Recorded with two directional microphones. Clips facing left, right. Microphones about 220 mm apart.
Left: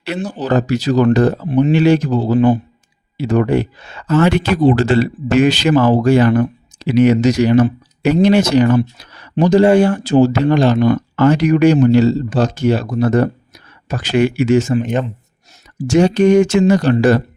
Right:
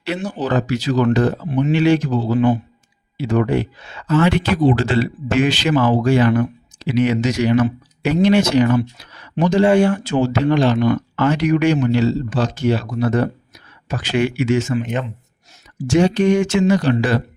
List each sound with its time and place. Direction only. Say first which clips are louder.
0.2 s speech: left 2 dB; 10° left (ahead or behind)
0.4 s speech: left 4 dB; 40° left (ahead or behind)